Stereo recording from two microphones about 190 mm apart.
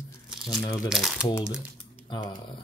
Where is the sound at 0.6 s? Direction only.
20° left (ahead or behind).